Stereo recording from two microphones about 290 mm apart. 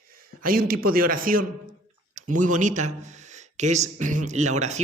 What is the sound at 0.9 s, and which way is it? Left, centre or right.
Speech, right.